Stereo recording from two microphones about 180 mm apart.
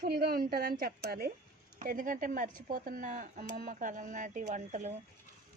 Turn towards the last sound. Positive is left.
turn(degrees=-40)  # may be behind; listen again after turning